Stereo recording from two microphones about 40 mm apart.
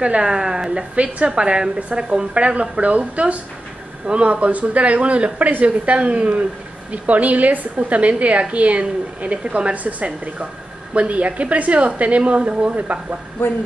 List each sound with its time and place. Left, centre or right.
0.0 s a woman's voice: right